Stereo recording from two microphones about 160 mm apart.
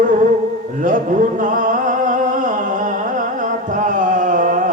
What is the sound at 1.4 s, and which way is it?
Music, 55° right (ahead or behind).